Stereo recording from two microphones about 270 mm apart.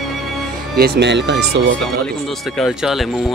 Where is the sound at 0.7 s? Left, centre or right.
Right.